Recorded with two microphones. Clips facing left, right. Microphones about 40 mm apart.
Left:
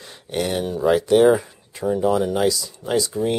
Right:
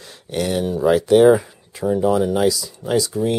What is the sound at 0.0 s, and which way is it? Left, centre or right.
Speech, centre.